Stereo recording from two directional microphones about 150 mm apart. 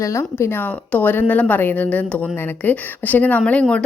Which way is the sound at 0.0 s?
20° left (ahead or behind).